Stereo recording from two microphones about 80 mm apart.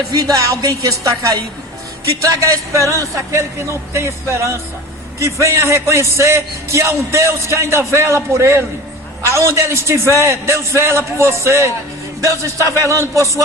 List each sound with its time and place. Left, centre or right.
0.2 s a woman's voice: right